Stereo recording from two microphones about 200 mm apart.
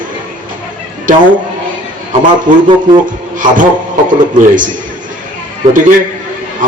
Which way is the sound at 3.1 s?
40° right (ahead or behind).